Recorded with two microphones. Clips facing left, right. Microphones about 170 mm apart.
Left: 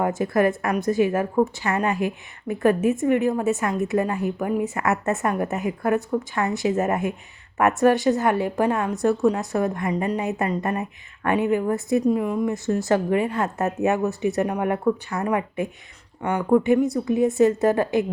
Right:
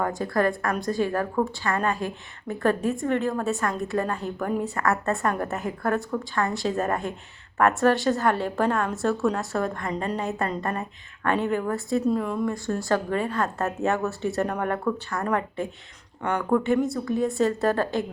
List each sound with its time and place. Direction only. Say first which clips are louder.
0.0 s a woman's voice: left 4 dB; 20° left (ahead or behind)